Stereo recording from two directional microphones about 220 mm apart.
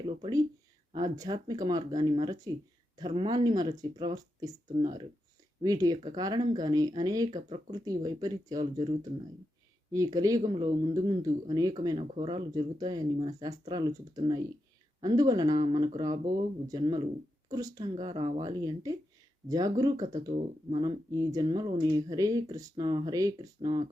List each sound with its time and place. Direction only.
0.0 s speech: 20° right (ahead or behind)